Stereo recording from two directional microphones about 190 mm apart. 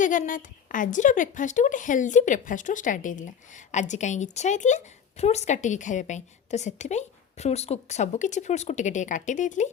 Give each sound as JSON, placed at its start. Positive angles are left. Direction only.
{"t": 0.0, "sound": "a woman's voice", "side_deg": 45}